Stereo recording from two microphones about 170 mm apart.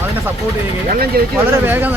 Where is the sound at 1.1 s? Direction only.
60° right (ahead or behind).